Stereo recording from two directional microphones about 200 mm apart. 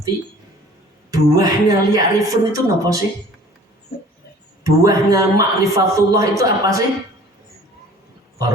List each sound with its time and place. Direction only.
1.1 s speech: 15° right (ahead or behind)
4.6 s speech: 15° right (ahead or behind)